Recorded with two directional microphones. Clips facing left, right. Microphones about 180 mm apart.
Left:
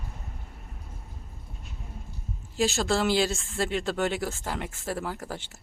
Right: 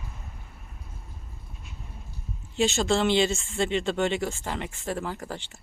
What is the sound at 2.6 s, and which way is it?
Speech, centre (ahead or behind).